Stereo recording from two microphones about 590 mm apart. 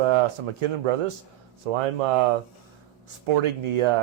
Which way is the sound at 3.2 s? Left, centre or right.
Right.